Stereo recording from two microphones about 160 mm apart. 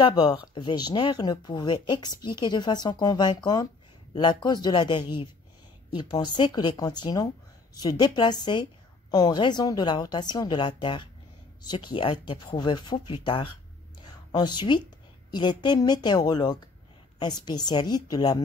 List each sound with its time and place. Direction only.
0.0 s speech: 25° left (ahead or behind)
14.0 s a sound: 25° left (ahead or behind)
15.3 s speech: 30° left (ahead or behind)